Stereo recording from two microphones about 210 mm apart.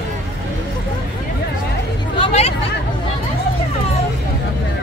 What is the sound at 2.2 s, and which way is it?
Hubbub, 30° left (ahead or behind).